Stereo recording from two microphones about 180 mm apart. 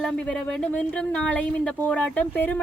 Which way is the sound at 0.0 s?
5° left (ahead or behind).